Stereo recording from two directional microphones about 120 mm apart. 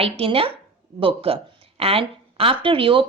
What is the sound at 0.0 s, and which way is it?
A woman's voice, 50° right (ahead or behind).